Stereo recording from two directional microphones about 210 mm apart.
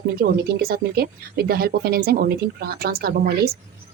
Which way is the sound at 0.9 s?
50° right (ahead or behind).